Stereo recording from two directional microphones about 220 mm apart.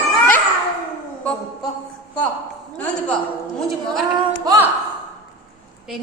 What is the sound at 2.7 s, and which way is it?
A woman's voice, 5° left (ahead or behind).